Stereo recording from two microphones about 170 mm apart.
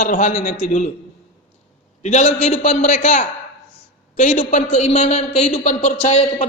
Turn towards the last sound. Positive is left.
turn(degrees=40)  # may be behind; listen again after turning